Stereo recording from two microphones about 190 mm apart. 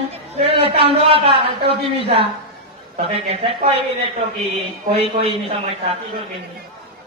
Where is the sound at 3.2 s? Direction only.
30° right (ahead or behind).